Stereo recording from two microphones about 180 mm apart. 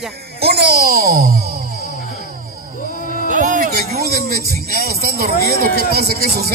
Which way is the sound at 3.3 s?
45° right (ahead or behind).